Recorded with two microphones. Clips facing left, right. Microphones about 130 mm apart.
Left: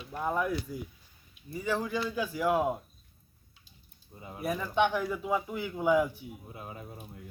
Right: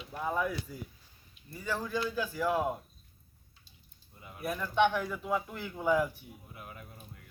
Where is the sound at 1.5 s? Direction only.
15° left (ahead or behind).